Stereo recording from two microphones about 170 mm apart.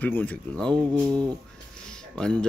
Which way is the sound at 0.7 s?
25° right (ahead or behind).